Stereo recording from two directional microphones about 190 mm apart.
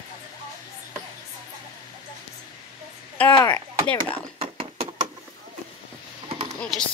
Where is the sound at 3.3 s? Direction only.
20° left (ahead or behind).